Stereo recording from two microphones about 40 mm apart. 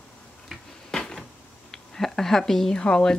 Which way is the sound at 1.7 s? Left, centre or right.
Centre.